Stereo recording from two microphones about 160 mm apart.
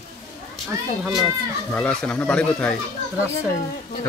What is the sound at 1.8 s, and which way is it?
Speech, 5° left (ahead or behind).